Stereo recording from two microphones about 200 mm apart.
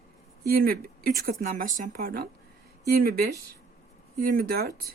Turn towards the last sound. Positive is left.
turn(degrees=-50)  # may be behind; listen again after turning